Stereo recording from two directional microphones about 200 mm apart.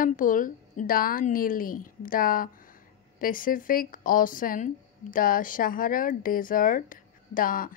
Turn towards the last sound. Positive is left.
turn(degrees=45)  # may be behind; listen again after turning